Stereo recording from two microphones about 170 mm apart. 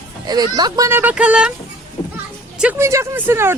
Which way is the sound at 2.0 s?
35° left (ahead or behind).